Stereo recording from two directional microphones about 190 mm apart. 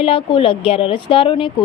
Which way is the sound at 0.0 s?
30° left (ahead or behind).